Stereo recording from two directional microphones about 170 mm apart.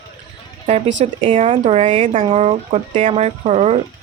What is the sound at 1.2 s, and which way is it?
Speech, 35° right (ahead or behind).